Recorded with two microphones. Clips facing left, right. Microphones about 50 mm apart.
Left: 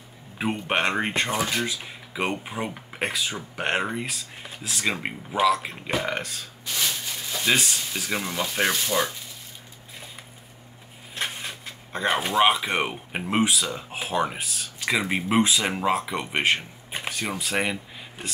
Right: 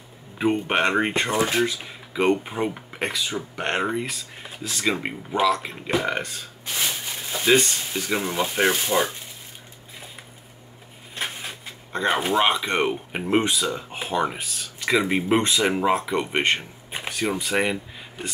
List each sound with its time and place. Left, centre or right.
0.4 s speech: centre
6.6 s a sound: centre
7.4 s speech: centre
8.7 s speech: right
11.1 s speech: centre